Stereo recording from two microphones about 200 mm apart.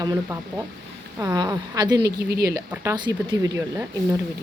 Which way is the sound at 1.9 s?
55° right (ahead or behind).